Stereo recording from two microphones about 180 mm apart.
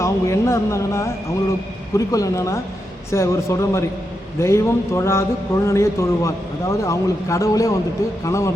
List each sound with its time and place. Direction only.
0.0 s a man's voice: 15° left (ahead or behind)